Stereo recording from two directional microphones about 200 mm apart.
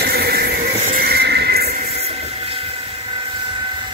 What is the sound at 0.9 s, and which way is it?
Neigh, 55° right (ahead or behind).